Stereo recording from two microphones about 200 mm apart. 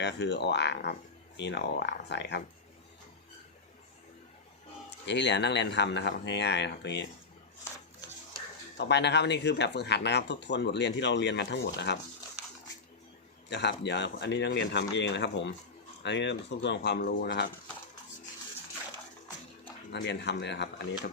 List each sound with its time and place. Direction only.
0.0 s speech: 60° left (ahead or behind)
5.0 s speech: 60° left (ahead or behind)
8.8 s speech: 60° left (ahead or behind)
13.5 s speech: 60° left (ahead or behind)
19.9 s speech: 60° left (ahead or behind)